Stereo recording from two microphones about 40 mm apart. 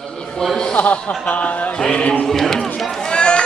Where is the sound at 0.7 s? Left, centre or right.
Left.